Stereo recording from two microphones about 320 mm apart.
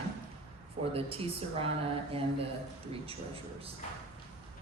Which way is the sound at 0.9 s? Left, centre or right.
Centre.